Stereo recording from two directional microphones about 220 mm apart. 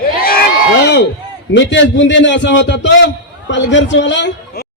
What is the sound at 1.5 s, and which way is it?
A man's voice, 55° left (ahead or behind).